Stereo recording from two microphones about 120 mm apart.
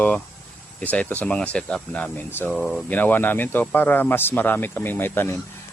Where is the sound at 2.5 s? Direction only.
5° left (ahead or behind).